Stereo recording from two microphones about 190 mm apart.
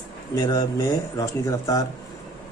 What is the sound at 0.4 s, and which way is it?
A man's voice, 20° left (ahead or behind).